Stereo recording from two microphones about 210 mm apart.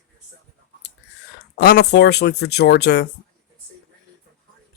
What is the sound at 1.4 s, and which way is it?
Speech, 50° left (ahead or behind).